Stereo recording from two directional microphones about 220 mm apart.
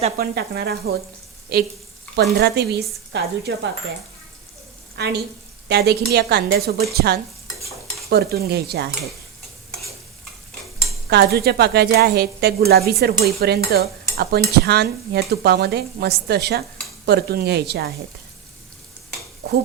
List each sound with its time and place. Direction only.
0.2 s speech: 45° right (ahead or behind)
5.0 s speech: 50° right (ahead or behind)
11.1 s speech: 45° right (ahead or behind)